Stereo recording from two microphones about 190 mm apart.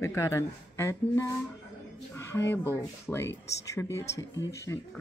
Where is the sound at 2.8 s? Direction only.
15° left (ahead or behind).